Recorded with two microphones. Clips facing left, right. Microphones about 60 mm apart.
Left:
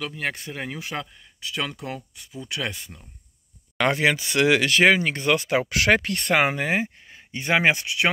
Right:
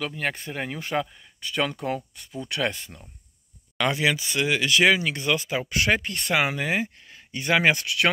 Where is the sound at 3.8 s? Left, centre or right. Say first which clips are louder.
Left 2 dB; left.